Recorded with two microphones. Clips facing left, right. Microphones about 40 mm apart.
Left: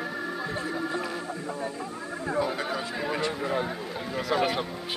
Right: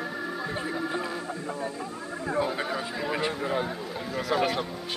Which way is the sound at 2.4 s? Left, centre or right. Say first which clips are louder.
Even; centre.